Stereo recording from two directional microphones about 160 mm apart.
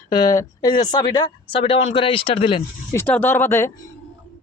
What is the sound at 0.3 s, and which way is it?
Speech, 25° left (ahead or behind).